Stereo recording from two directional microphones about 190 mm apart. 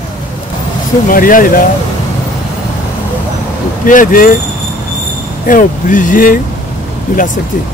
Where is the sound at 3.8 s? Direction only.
45° left (ahead or behind).